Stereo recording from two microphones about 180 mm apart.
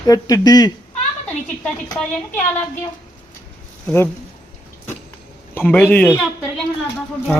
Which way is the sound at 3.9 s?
10° left (ahead or behind).